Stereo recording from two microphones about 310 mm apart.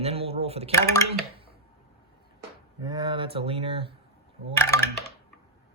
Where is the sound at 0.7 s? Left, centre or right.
Centre.